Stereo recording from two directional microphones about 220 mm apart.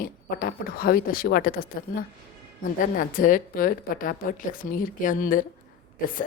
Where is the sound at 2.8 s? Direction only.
40° left (ahead or behind).